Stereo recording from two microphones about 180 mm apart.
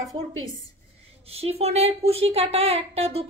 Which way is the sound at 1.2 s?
35° right (ahead or behind).